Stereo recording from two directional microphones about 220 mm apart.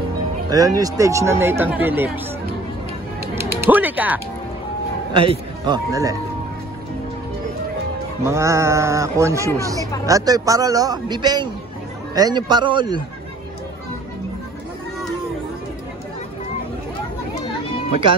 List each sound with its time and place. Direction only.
0.5 s speech: 15° right (ahead or behind)
3.3 s music: 10° right (ahead or behind)
5.1 s a man's voice: 25° right (ahead or behind)
8.2 s a man's voice: 10° right (ahead or behind)